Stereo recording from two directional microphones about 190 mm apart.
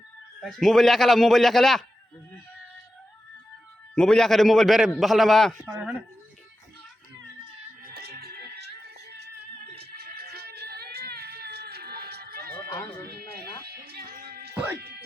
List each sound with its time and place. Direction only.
0.3 s a man's voice: centre (ahead or behind)
3.9 s a man's voice: 5° left (ahead or behind)
7.8 s music: 55° right (ahead or behind)
9.7 s child singing: 55° right (ahead or behind)
13.0 s music: 55° right (ahead or behind)
14.5 s music: 10° right (ahead or behind)
14.8 s music: 60° right (ahead or behind)